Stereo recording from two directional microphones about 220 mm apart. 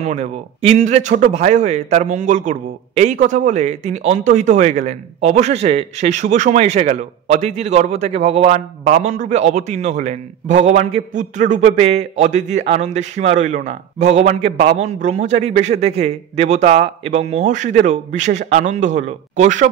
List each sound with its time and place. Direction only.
0.0 s a man's voice: 30° right (ahead or behind)